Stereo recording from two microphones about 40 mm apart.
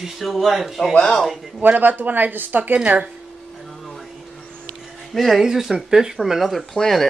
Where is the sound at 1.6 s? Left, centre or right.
Right.